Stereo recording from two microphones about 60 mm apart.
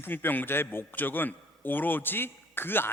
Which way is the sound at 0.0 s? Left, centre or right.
Left.